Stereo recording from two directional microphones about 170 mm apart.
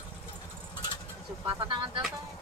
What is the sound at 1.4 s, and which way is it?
Speech, 30° right (ahead or behind).